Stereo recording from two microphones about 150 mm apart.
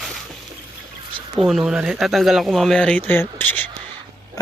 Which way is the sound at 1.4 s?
5° right (ahead or behind).